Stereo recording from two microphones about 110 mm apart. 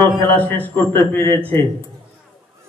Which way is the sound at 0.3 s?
15° left (ahead or behind).